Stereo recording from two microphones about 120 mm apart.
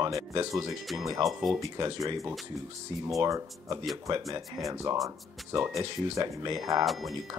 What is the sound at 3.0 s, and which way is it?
Speech, 25° right (ahead or behind).